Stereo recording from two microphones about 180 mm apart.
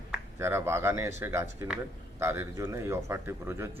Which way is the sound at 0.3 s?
15° right (ahead or behind).